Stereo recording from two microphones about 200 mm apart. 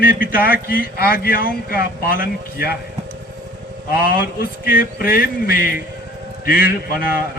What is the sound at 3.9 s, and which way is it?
A man's voice, 50° left (ahead or behind).